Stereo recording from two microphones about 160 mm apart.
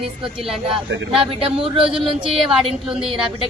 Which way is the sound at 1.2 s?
35° right (ahead or behind).